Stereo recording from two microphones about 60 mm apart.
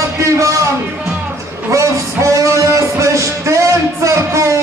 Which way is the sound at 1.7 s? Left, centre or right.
Right.